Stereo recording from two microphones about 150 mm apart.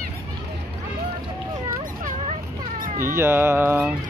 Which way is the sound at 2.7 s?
70° right (ahead or behind).